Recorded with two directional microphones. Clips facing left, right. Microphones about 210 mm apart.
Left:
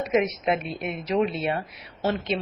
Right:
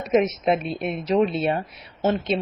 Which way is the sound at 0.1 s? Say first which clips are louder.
Right 5 dB; 30° right (ahead or behind).